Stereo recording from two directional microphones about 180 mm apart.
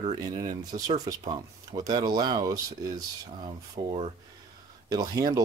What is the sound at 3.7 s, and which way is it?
Speech, 35° right (ahead or behind).